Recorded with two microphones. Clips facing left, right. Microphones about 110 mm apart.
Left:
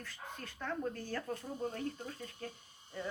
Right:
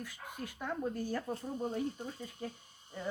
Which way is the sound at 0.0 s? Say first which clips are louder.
Right 3 dB; 10° right (ahead or behind).